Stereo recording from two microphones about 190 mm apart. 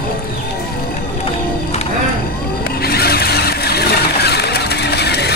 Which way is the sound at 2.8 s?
55° left (ahead or behind).